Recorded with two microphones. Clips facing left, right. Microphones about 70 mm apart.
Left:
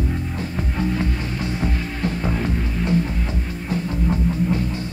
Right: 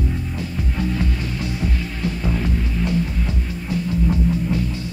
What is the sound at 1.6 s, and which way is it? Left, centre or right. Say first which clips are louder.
Music: left 1 dB; left.